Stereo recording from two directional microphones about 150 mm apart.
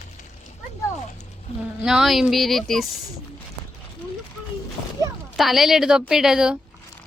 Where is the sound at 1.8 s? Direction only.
5° right (ahead or behind).